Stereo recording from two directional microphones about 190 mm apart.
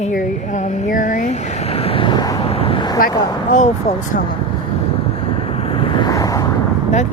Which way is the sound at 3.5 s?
40° left (ahead or behind).